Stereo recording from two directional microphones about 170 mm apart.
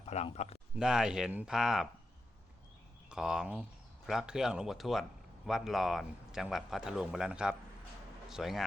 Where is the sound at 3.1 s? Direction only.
5° right (ahead or behind).